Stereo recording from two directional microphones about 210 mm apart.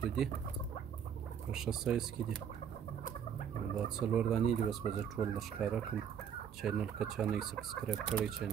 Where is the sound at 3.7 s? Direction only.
Centre (ahead or behind).